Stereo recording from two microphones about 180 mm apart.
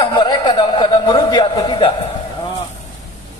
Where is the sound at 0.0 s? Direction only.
25° left (ahead or behind).